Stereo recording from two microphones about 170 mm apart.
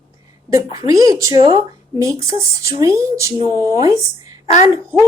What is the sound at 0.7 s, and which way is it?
Speech, 20° right (ahead or behind).